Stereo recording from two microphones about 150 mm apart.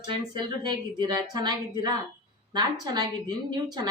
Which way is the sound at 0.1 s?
30° right (ahead or behind).